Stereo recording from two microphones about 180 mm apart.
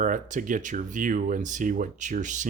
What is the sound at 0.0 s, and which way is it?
Speech, 45° right (ahead or behind).